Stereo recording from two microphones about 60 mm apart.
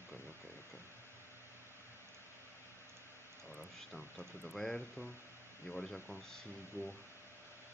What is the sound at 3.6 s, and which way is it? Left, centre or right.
Speech, centre.